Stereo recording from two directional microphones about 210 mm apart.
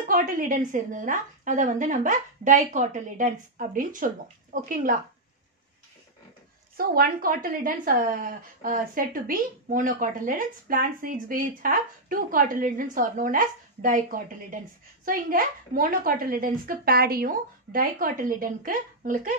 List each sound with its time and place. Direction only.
0.1 s a woman's voice: 40° right (ahead or behind)
6.8 s a woman's voice: 45° right (ahead or behind)